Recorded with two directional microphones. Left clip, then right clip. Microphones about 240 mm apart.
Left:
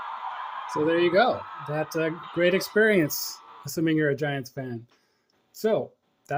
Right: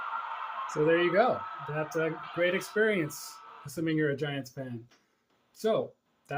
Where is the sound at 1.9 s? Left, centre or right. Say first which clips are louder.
Left 4 dB; left.